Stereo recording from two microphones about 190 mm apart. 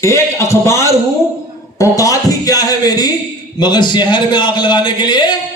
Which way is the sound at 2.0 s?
20° left (ahead or behind).